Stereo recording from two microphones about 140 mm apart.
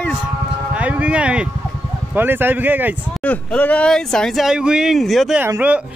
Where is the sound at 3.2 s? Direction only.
10° left (ahead or behind).